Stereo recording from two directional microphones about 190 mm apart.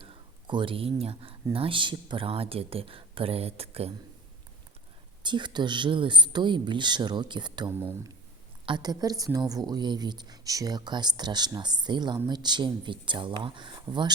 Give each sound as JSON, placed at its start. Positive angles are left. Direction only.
{"t": 0.0, "sound": "a woman's voice", "side_deg": -25}
{"t": 5.2, "sound": "a woman's voice", "side_deg": -25}
{"t": 7.7, "sound": "speech", "side_deg": -10}
{"t": 8.6, "sound": "a woman's voice", "side_deg": -20}